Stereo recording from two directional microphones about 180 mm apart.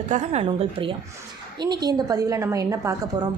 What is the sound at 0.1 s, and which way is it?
A woman's voice, 40° right (ahead or behind).